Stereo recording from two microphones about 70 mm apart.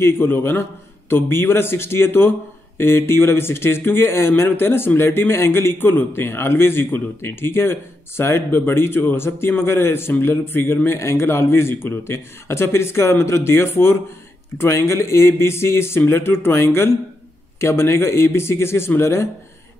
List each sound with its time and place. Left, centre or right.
0.0 s speech: left